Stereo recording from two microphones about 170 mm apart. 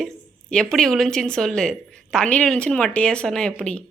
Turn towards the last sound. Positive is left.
turn(degrees=5)  # may be behind; listen again after turning